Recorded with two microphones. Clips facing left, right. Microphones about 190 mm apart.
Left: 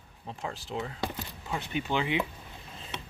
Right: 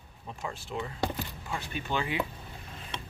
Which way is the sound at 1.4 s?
20° left (ahead or behind).